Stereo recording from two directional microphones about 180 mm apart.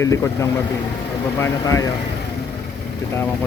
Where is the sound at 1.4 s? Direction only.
15° left (ahead or behind).